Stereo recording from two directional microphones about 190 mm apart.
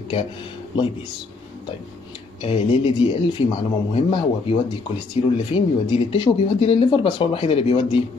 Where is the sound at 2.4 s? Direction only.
30° left (ahead or behind).